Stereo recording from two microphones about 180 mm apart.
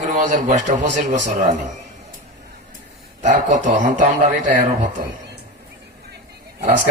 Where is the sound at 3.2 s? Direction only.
45° right (ahead or behind).